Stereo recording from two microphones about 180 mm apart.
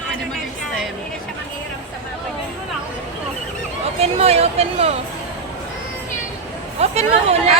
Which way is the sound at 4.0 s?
35° right (ahead or behind).